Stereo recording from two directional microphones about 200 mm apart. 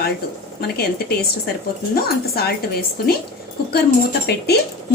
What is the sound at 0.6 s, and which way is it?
A woman's voice, 50° left (ahead or behind).